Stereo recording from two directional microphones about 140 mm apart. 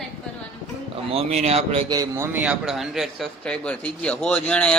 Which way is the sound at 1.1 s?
45° right (ahead or behind).